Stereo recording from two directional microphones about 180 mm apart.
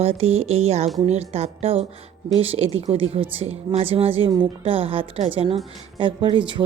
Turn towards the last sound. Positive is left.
turn(degrees=-25)  # may be behind; listen again after turning